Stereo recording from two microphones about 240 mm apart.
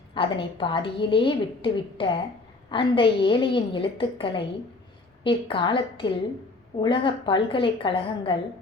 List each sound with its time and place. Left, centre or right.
0.1 s a woman's voice: left